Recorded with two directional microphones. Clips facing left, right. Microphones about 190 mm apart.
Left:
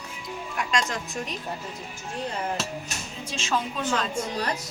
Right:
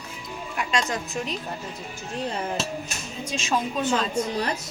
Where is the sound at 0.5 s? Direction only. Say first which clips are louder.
Right 2 dB; 5° right (ahead or behind).